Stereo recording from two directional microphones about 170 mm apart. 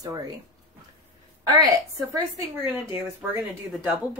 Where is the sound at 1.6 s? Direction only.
20° right (ahead or behind).